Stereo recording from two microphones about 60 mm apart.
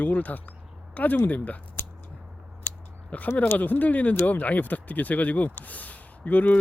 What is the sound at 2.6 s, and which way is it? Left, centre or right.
Scissors, left.